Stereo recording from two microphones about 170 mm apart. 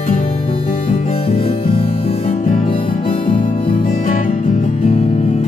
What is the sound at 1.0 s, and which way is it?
Music, 35° left (ahead or behind).